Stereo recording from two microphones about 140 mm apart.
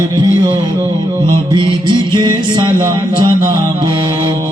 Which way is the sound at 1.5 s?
35° right (ahead or behind).